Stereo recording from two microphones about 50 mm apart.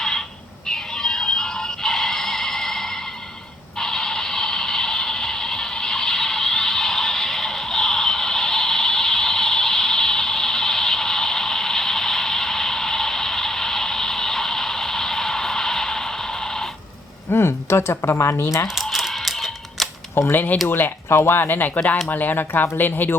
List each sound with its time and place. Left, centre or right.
0.7 s music: centre
3.8 s a sound: centre
17.3 s speech: left
18.7 s typing: centre
20.3 s speech: left
20.7 s speech: left